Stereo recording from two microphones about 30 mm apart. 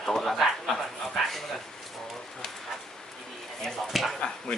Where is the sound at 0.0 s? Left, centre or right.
Centre.